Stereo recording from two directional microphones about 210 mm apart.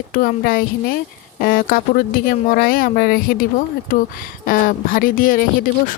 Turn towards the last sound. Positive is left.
turn(degrees=40)  # may be behind; listen again after turning